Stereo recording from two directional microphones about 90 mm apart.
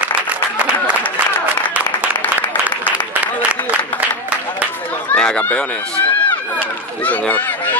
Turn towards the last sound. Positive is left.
turn(degrees=20)  # may be behind; listen again after turning